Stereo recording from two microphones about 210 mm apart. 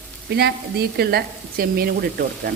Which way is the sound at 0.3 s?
50° right (ahead or behind).